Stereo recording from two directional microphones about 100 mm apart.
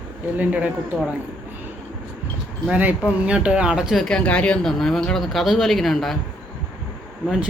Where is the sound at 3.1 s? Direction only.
10° right (ahead or behind).